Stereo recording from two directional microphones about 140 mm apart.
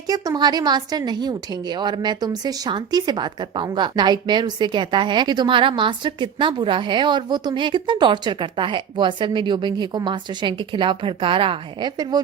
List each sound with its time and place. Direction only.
0.1 s a woman's voice: 30° right (ahead or behind)